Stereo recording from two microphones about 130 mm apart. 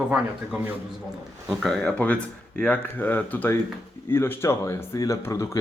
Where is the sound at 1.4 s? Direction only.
5° left (ahead or behind).